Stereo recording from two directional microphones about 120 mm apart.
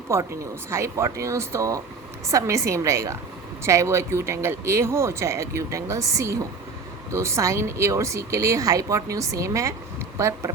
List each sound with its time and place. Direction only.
0.1 s speech: 20° right (ahead or behind)